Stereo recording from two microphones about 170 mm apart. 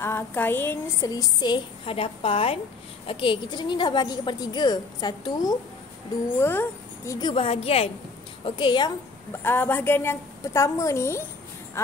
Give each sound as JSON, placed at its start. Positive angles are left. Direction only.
{"t": 0.0, "sound": "a woman's voice", "side_deg": 10}
{"t": 7.2, "sound": "a woman's voice", "side_deg": 30}
{"t": 9.3, "sound": "a woman's voice", "side_deg": 10}